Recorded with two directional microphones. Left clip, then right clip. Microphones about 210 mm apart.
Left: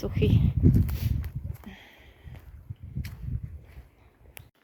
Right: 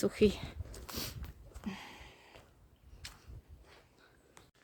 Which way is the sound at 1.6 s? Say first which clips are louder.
Right 2 dB; 25° right (ahead or behind).